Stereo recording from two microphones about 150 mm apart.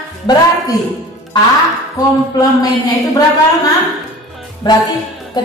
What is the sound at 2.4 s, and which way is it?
Speech, 25° left (ahead or behind).